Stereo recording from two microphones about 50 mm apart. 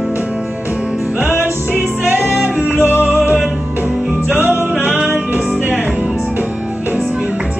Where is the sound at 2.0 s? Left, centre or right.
Right.